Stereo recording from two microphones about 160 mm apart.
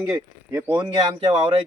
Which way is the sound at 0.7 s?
25° right (ahead or behind).